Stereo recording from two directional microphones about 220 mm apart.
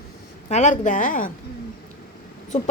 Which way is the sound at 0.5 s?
30° left (ahead or behind).